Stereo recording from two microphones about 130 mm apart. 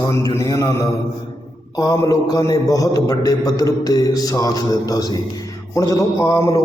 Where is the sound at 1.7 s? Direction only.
25° left (ahead or behind).